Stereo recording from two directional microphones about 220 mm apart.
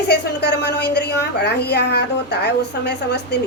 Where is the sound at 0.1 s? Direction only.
50° left (ahead or behind).